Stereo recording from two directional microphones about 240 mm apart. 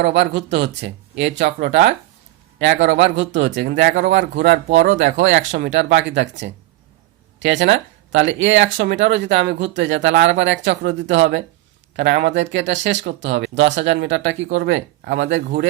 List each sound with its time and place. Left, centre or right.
0.0 s speech: right
5.5 s speech: right